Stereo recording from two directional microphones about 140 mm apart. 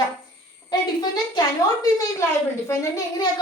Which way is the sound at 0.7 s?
30° left (ahead or behind).